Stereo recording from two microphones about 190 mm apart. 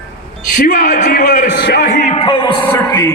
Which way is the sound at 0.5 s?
45° left (ahead or behind).